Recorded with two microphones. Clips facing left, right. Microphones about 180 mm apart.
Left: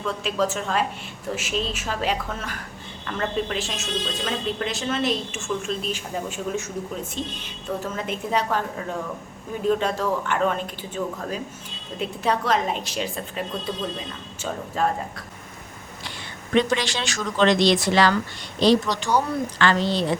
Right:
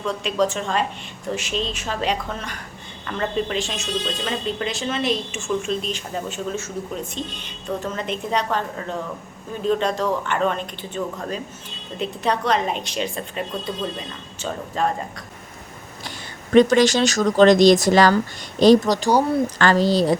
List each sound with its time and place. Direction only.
0.0 s a woman's voice: 5° left (ahead or behind)
7.8 s a woman's voice: 5° left (ahead or behind)
14.8 s speech: 5° left (ahead or behind)
16.6 s a woman's voice: 45° right (ahead or behind)